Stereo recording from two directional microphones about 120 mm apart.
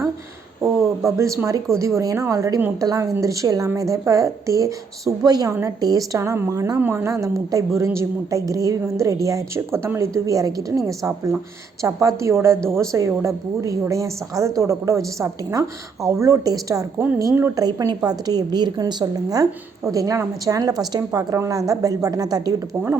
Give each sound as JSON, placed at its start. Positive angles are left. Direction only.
{"t": 1.0, "sound": "a woman's voice", "side_deg": -25}